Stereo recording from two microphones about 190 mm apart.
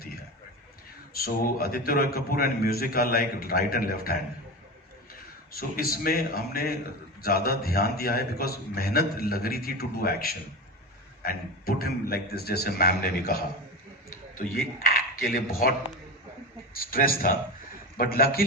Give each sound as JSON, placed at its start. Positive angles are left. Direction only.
{"t": 1.1, "sound": "a man's voice", "side_deg": 50}
{"t": 5.5, "sound": "a man's voice", "side_deg": 50}
{"t": 16.7, "sound": "a man's voice", "side_deg": 50}